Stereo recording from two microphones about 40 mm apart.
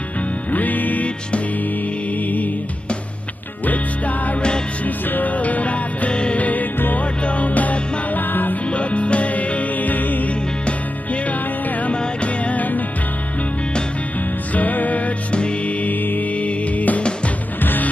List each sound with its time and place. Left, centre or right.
0.5 s music: left
2.2 s music: left
4.8 s music: left
6.4 s music: left
8.6 s music: left
14.5 s music: left
15.3 s music: left
15.8 s music: left
16.3 s music: left
17.6 s music: left